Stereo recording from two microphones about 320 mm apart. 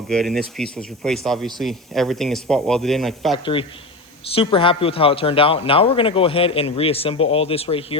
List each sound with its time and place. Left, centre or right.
0.1 s a man's voice: centre
3.3 s a man's voice: centre